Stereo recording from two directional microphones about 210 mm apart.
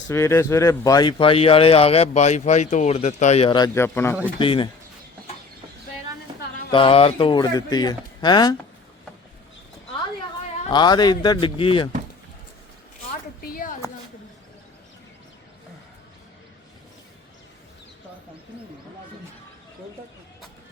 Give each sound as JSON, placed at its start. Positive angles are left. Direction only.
{"t": 0.1, "sound": "speech", "side_deg": 15}
{"t": 4.4, "sound": "speech", "side_deg": 25}
{"t": 6.7, "sound": "speech", "side_deg": 25}
{"t": 10.7, "sound": "speech", "side_deg": 20}
{"t": 13.4, "sound": "a sound", "side_deg": 45}